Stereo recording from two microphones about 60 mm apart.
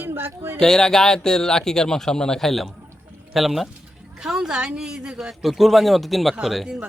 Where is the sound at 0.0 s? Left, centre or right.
Right.